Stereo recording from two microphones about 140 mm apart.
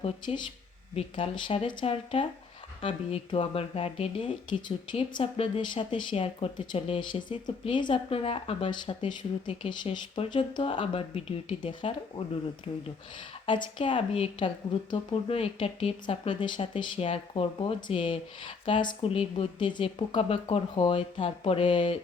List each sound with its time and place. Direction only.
0.0 s speech: 45° left (ahead or behind)
13.4 s speech: 35° left (ahead or behind)